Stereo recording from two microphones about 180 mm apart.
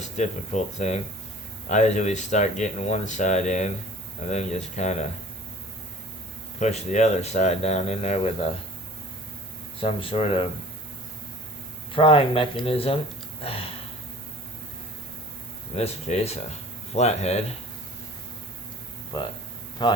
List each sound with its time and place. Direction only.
0.0 s speech: 40° left (ahead or behind)
6.6 s speech: 40° left (ahead or behind)
9.8 s speech: 30° left (ahead or behind)
11.9 s speech: 30° left (ahead or behind)
15.7 s speech: 35° left (ahead or behind)
19.1 s speech: 20° left (ahead or behind)